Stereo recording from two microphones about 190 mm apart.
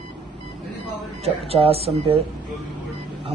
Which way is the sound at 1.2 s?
30° right (ahead or behind).